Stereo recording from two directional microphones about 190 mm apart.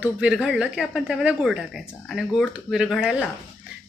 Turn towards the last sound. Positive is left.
turn(degrees=-5)  # may be behind; listen again after turning